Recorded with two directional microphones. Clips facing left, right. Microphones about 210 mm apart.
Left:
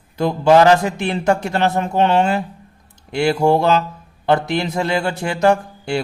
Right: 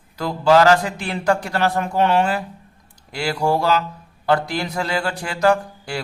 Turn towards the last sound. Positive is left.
turn(degrees=25)  # may be behind; listen again after turning